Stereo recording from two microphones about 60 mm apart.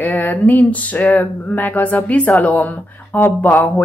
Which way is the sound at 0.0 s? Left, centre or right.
Left.